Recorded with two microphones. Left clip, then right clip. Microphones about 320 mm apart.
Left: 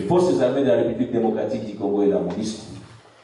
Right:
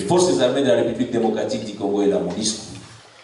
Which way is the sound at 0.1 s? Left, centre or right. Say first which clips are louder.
Right 1 dB; centre.